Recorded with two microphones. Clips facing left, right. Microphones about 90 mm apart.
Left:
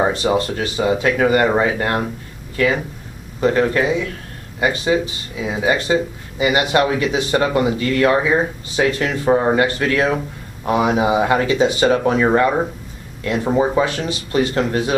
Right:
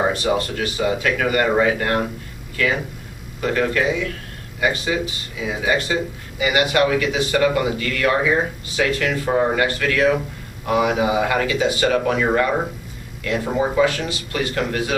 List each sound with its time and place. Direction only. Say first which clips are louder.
0.1 s speech: left 3 dB; 25° left (ahead or behind)
3.3 s speech: left 4 dB; 25° left (ahead or behind)